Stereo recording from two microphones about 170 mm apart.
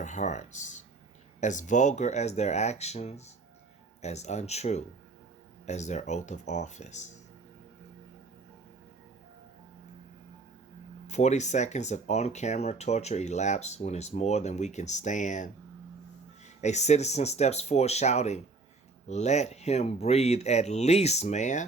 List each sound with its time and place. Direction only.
0.0 s speech: 45° left (ahead or behind)
11.0 s speech: 40° left (ahead or behind)
16.6 s speech: 40° left (ahead or behind)